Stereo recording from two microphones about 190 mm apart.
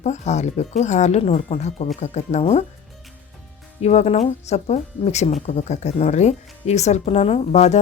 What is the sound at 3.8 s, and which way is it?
Speech, 35° left (ahead or behind).